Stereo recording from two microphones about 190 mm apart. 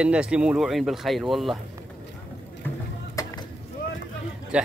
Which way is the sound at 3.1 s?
20° left (ahead or behind).